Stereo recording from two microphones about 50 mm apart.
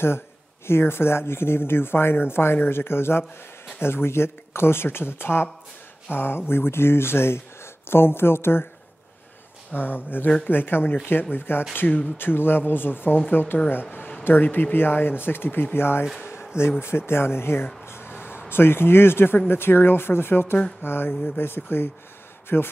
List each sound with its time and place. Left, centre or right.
0.7 s speech: left
9.8 s speech: left
16.3 s a sound: left
16.8 s speech: left
17.8 s a sound: left
18.5 s speech: left